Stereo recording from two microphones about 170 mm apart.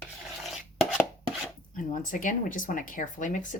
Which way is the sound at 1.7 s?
50° left (ahead or behind).